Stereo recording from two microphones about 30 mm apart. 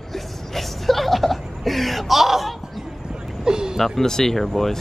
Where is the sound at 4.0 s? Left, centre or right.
Centre.